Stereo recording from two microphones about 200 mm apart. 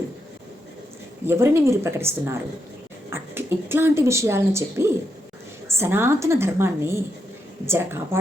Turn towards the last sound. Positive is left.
turn(degrees=-10)  # may be behind; listen again after turning